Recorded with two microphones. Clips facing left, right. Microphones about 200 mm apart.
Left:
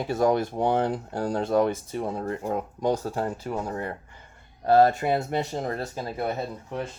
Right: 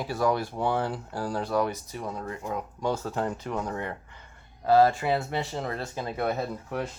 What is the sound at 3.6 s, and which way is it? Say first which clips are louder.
Speech: left 1 dB; 35° left (ahead or behind).